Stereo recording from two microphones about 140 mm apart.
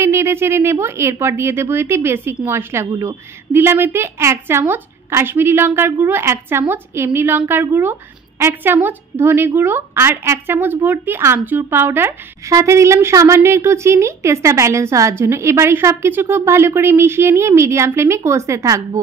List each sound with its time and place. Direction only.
0.0 s a woman's voice: 20° right (ahead or behind)